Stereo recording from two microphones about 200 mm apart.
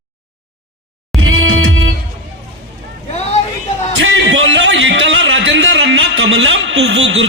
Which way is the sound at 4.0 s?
70° right (ahead or behind).